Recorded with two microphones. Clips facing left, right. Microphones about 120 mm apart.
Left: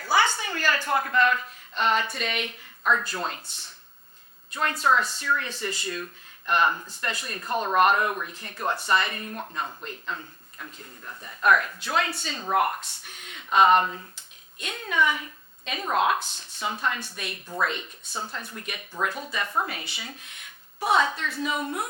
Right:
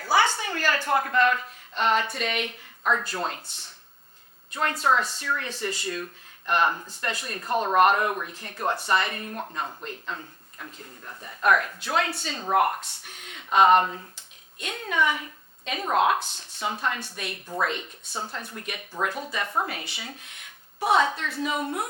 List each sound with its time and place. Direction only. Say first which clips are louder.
0.0 s a woman's voice: right 1 dB; 50° right (ahead or behind)
2.8 s a woman's voice: even; 40° right (ahead or behind)
4.5 s a woman's voice: even; 45° right (ahead or behind)
8.9 s a woman's voice: even; 50° right (ahead or behind)
9.4 s a woman's voice: even; 30° right (ahead or behind); by 12.1 s 50° right (ahead or behind)
12.1 s speech: right 1 dB; 60° right (ahead or behind)
12.4 s a woman's voice: right 2 dB; 45° right (ahead or behind)
14.6 s a woman's voice: even; 50° right (ahead or behind)
16.7 s a woman's voice: even; 45° right (ahead or behind)
18.2 s speech: right 1 dB; 30° right (ahead or behind)
18.4 s a woman's voice: right 1 dB; 50° right (ahead or behind)